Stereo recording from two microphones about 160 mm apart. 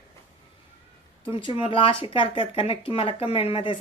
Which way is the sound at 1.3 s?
35° left (ahead or behind).